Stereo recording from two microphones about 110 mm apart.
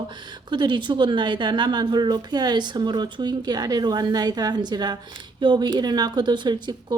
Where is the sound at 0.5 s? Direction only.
45° right (ahead or behind).